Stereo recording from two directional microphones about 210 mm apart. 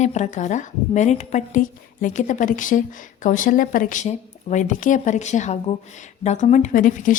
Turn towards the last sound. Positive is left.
turn(degrees=40)  # may be behind; listen again after turning